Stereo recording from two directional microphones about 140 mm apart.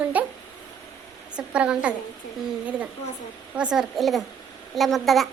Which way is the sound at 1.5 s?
5° right (ahead or behind).